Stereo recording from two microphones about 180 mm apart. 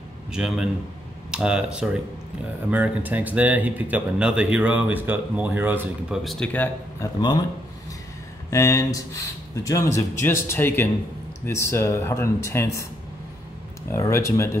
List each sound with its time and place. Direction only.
0.3 s speech: 5° right (ahead or behind)
7.2 s a man's voice: 25° left (ahead or behind)
8.5 s speech: 20° left (ahead or behind)
13.9 s speech: 15° left (ahead or behind)